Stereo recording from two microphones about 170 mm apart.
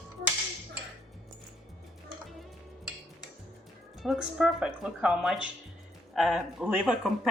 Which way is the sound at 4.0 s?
Centre (ahead or behind).